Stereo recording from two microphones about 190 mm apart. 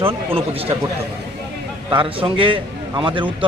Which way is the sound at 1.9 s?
25° right (ahead or behind).